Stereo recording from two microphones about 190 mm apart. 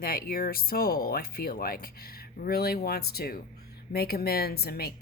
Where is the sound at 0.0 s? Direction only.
50° left (ahead or behind).